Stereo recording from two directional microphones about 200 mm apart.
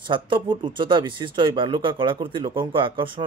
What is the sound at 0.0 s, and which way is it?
Speech, 25° right (ahead or behind).